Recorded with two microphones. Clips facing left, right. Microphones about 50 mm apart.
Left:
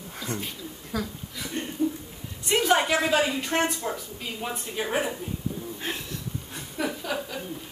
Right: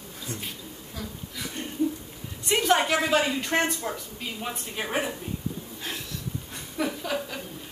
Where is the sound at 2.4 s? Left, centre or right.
Centre.